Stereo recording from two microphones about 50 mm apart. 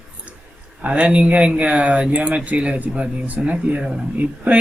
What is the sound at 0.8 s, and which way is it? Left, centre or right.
Speech, right.